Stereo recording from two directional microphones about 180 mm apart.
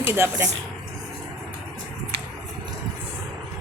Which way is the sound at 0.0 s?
15° right (ahead or behind).